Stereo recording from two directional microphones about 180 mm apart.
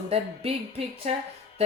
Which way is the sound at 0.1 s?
35° right (ahead or behind).